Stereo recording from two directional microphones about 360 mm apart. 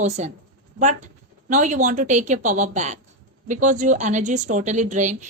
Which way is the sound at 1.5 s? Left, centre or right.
Right.